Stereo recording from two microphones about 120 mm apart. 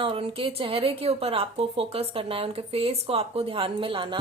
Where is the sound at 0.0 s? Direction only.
50° right (ahead or behind).